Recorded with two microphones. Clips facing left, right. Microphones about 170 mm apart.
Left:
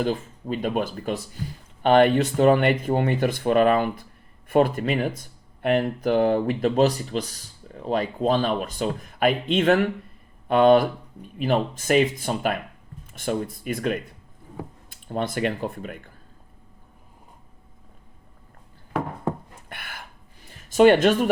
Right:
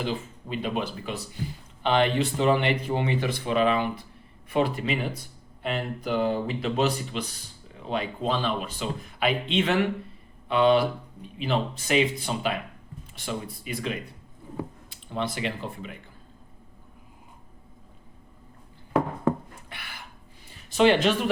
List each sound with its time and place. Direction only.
0.0 s speech: 45° left (ahead or behind)
19.6 s a sound: 50° left (ahead or behind)
20.7 s speech: 50° left (ahead or behind)